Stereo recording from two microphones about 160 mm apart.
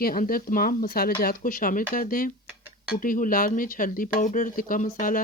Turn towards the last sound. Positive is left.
turn(degrees=55)  # may be behind; listen again after turning